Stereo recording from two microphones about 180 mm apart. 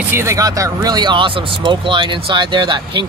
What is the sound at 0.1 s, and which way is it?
Speech, 15° right (ahead or behind).